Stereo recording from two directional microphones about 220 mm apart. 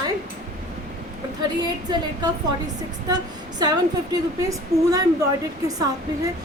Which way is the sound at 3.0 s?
20° right (ahead or behind).